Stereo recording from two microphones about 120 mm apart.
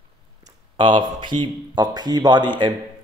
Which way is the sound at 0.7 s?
40° right (ahead or behind).